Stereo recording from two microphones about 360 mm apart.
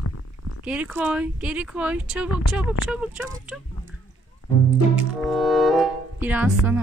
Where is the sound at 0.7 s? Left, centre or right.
Centre.